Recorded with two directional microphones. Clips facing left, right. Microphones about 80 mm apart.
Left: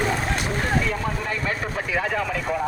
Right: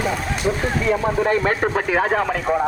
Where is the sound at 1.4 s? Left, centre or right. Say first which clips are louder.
Right 7 dB; right.